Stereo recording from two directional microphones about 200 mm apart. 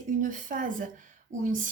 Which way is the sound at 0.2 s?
40° right (ahead or behind).